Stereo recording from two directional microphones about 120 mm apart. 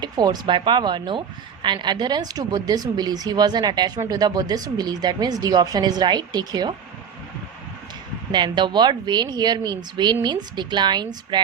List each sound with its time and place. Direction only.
0.0 s speech: 35° right (ahead or behind)
8.3 s speech: 40° right (ahead or behind)